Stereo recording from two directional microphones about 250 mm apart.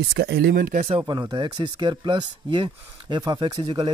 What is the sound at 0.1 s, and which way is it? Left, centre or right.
Speech, right.